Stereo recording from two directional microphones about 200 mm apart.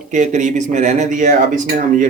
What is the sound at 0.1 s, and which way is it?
Speech, 40° right (ahead or behind).